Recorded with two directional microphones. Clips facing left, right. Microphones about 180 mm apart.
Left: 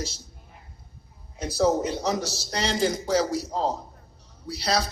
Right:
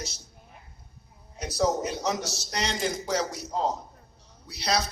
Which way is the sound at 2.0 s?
30° left (ahead or behind).